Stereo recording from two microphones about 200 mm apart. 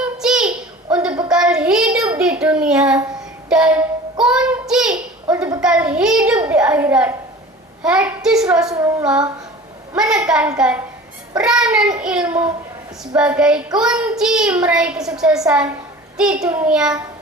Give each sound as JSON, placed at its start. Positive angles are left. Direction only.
{"t": 0.0, "sound": "child singing", "side_deg": -5}
{"t": 2.0, "sound": "a sound", "side_deg": -5}
{"t": 3.5, "sound": "a woman's voice", "side_deg": -5}
{"t": 4.2, "sound": "child singing", "side_deg": -5}
{"t": 5.6, "sound": "a woman's voice", "side_deg": -5}
{"t": 8.7, "sound": "child singing", "side_deg": -15}
{"t": 9.9, "sound": "a woman's voice", "side_deg": -5}
{"t": 11.9, "sound": "child singing", "side_deg": -5}
{"t": 13.1, "sound": "a woman's voice", "side_deg": -5}
{"t": 16.3, "sound": "child singing", "side_deg": -15}
{"t": 16.6, "sound": "a woman's voice", "side_deg": -5}